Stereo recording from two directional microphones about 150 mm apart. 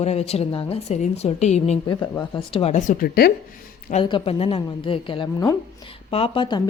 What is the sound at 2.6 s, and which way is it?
Speech, 55° left (ahead or behind).